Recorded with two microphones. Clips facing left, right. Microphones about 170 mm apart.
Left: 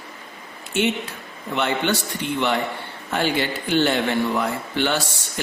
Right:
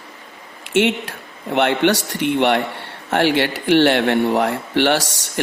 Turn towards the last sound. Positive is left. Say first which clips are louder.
# right 5 dB
turn(degrees=-75)  # may be behind; listen again after turning